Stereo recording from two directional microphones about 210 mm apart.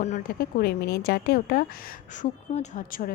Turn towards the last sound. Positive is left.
turn(degrees=40)  # may be behind; listen again after turning